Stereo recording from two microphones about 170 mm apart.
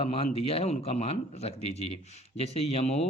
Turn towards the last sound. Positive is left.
turn(degrees=40)  # may be behind; listen again after turning